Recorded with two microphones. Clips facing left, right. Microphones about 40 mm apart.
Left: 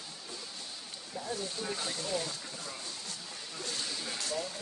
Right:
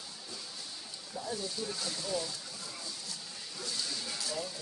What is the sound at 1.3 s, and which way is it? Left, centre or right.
Speech, left.